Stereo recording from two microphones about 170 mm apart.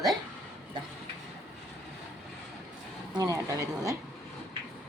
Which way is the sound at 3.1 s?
20° right (ahead or behind).